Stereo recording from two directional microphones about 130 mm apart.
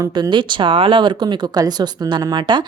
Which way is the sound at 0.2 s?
35° right (ahead or behind).